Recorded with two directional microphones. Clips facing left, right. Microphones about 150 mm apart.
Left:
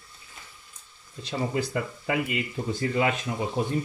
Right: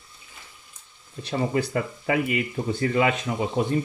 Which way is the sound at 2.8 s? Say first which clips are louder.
Right 3 dB; 85° right.